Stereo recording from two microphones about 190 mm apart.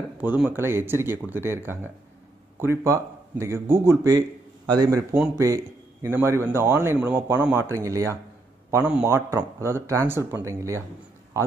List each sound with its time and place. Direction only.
0.2 s speech: 10° right (ahead or behind)
6.0 s speech: 15° right (ahead or behind)
8.6 s a sound: 15° right (ahead or behind)
9.0 s speech: 15° right (ahead or behind)